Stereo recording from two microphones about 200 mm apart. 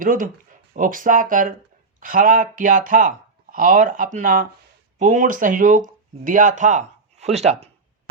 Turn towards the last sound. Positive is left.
turn(degrees=-35)  # may be behind; listen again after turning